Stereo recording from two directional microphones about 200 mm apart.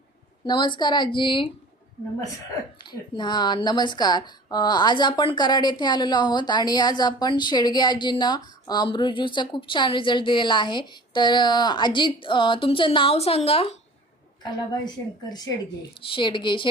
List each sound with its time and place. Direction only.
0.4 s a woman's voice: 20° left (ahead or behind)
2.8 s a woman's voice: 20° left (ahead or behind)
14.7 s a woman's voice: 20° left (ahead or behind)